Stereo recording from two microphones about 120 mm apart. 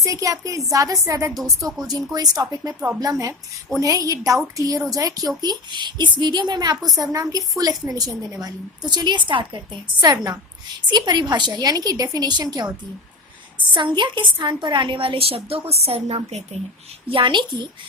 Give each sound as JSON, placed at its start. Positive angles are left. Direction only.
{"t": 0.0, "sound": "a woman's voice", "side_deg": -25}
{"t": 13.7, "sound": "a woman's voice", "side_deg": -40}
{"t": 17.1, "sound": "a woman's voice", "side_deg": -45}